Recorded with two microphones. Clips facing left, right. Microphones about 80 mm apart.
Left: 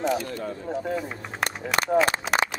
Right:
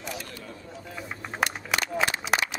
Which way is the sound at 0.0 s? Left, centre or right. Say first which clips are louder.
Left 12 dB; left.